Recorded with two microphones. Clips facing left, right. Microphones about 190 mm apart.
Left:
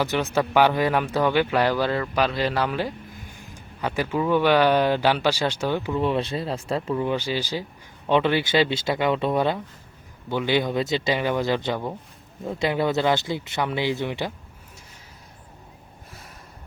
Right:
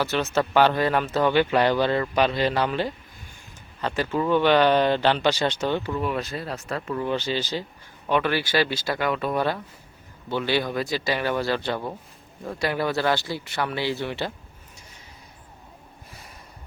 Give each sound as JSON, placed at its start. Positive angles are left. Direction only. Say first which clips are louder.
{"t": 0.0, "sound": "speech", "louder": "left 1 dB", "side_deg": 15}
{"t": 6.0, "sound": "speech", "louder": "left 4 dB", "side_deg": 30}
{"t": 6.9, "sound": "speech", "louder": "even", "side_deg": 15}
{"t": 8.0, "sound": "speech", "louder": "left 3 dB", "side_deg": 25}